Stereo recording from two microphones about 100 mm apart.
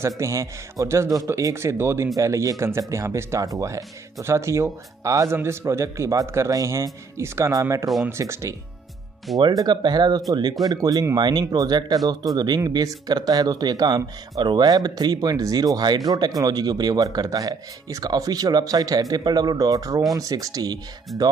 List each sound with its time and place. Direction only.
0.0 s speech: 30° right (ahead or behind)
9.4 s speech: 40° right (ahead or behind)